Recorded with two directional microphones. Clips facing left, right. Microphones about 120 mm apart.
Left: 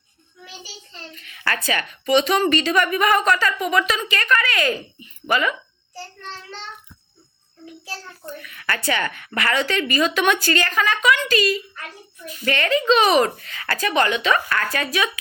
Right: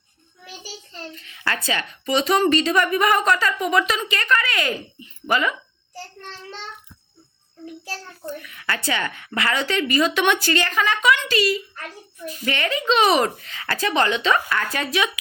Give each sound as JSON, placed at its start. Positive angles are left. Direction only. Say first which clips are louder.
{"t": 1.1, "sound": "a woman's voice", "louder": "left 1 dB", "side_deg": -25}
{"t": 8.4, "sound": "a woman's voice", "louder": "left 4 dB", "side_deg": -20}